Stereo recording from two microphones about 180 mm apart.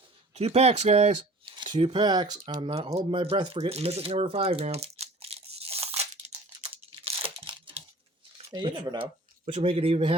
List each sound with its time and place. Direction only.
0.3 s speech: 35° right (ahead or behind)
7.0 s crunch: 30° right (ahead or behind)
8.5 s speech: 25° right (ahead or behind)